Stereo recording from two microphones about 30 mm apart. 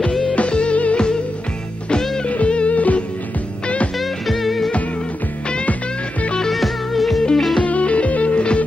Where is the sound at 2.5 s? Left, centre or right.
Left.